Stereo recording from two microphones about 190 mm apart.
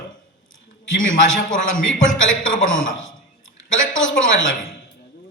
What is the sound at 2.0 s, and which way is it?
A man's voice, 90° left.